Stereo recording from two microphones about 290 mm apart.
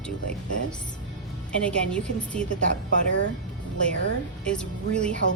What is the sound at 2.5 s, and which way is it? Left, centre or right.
Speech, left.